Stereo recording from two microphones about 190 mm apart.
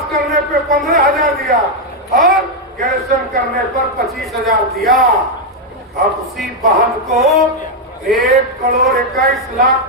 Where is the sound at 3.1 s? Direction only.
45° right (ahead or behind).